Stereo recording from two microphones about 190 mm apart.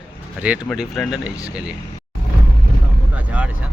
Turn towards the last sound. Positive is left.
turn(degrees=-5)  # may be behind; listen again after turning